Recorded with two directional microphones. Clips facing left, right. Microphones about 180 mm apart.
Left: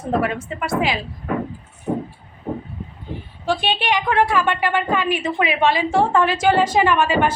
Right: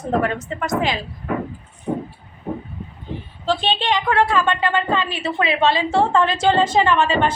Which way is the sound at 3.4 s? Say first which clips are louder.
Even; 10° left (ahead or behind).